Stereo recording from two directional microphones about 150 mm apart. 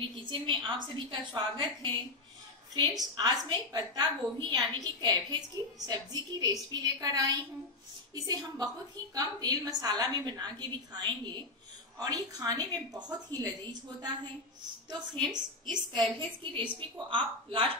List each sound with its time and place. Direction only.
0.1 s a woman's voice: 35° right (ahead or behind)
15.3 s a woman's voice: 30° right (ahead or behind)